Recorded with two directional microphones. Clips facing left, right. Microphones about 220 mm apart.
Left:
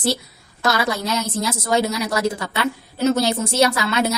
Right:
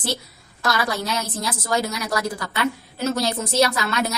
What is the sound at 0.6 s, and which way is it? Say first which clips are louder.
A woman's voice: left 3 dB; 25° left (ahead or behind).